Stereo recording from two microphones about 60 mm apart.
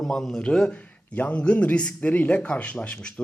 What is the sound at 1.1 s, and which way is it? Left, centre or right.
Speech, left.